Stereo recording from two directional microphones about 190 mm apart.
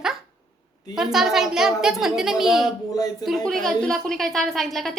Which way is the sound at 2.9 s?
20° left (ahead or behind).